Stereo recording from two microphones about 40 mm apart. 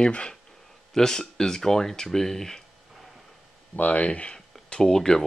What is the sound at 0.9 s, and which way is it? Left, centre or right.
Speech, centre.